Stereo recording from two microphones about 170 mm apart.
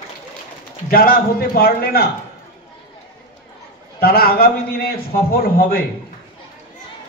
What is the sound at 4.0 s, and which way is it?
A man's voice, 60° left (ahead or behind).